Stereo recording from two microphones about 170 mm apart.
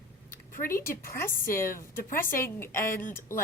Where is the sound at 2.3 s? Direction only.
15° left (ahead or behind).